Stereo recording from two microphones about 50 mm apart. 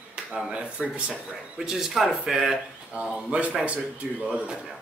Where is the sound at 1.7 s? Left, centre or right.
Centre.